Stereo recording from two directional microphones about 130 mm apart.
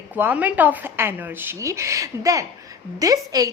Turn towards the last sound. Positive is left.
turn(degrees=-30)  # may be behind; listen again after turning